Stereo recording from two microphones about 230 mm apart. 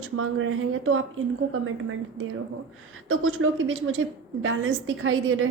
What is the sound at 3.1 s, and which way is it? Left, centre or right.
A woman's voice, right.